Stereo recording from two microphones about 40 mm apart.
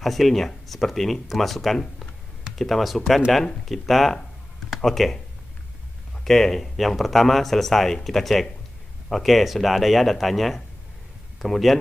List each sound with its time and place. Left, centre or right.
0.0 s speech: centre
6.2 s speech: centre